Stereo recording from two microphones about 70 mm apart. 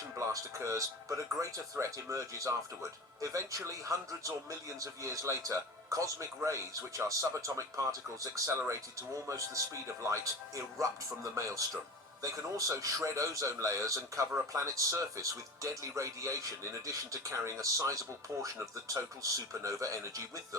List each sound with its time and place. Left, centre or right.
0.2 s a man's voice: right
18.9 s a man's voice: right